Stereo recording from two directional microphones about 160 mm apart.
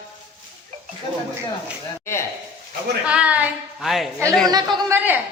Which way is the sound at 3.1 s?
10° right (ahead or behind).